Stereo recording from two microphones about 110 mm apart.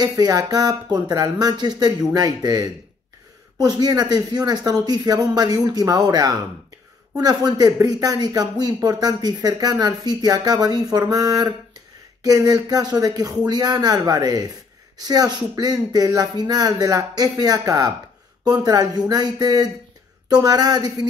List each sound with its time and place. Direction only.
0.0 s speech: 35° right (ahead or behind)